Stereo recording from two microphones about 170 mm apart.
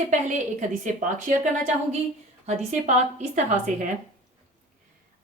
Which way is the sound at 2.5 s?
45° right (ahead or behind).